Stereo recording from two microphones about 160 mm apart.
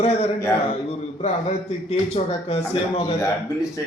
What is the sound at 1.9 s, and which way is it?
Speech, 40° left (ahead or behind).